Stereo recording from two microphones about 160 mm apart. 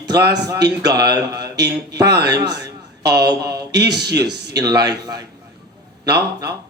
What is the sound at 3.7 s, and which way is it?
Speech, 90° right.